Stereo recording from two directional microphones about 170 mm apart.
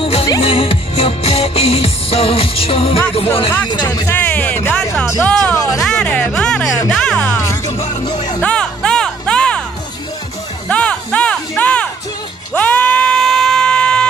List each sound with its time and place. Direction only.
0.0 s music: 35° left (ahead or behind)
3.6 s speech: 25° left (ahead or behind)
4.9 s speech: centre (ahead or behind)
5.8 s music: 5° left (ahead or behind)
7.7 s music: 30° left (ahead or behind)
8.4 s music: 5° left (ahead or behind)
10.7 s music: 5° left (ahead or behind)